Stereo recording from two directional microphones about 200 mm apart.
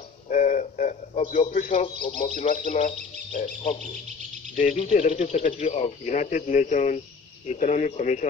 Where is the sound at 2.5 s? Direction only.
40° left (ahead or behind).